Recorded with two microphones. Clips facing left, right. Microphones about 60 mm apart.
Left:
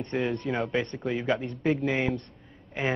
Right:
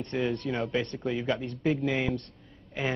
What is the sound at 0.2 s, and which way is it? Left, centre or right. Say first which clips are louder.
A man's voice: even; centre.